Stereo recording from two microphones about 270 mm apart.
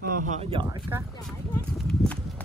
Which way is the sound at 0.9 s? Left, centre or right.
Centre.